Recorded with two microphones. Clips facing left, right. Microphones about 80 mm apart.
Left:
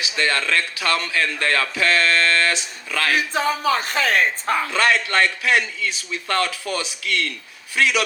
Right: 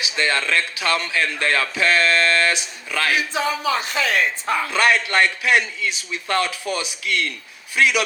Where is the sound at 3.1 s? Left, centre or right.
Left.